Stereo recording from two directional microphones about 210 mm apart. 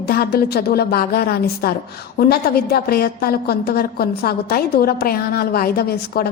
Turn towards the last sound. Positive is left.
turn(degrees=45)  # may be behind; listen again after turning